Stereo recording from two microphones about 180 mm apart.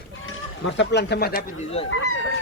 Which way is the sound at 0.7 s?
75° left (ahead or behind).